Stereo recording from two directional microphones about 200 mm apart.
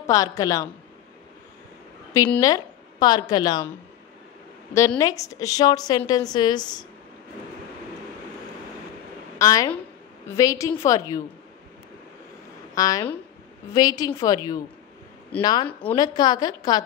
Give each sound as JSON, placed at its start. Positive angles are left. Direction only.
{"t": 0.0, "sound": "a woman's voice", "side_deg": 15}
{"t": 2.4, "sound": "a woman's voice", "side_deg": 20}
{"t": 4.7, "sound": "a woman's voice", "side_deg": 15}
{"t": 9.4, "sound": "a woman's voice", "side_deg": 15}
{"t": 12.7, "sound": "a woman's voice", "side_deg": 15}